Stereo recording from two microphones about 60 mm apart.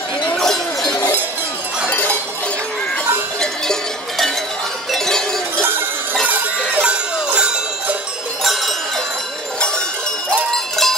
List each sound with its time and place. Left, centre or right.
1.9 s cowbell: left
4.9 s a sound: centre
6.7 s jingle bell: centre
10.5 s music: centre